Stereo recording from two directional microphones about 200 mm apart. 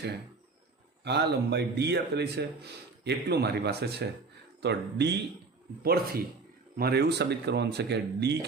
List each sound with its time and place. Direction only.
1.0 s speech: 55° right (ahead or behind)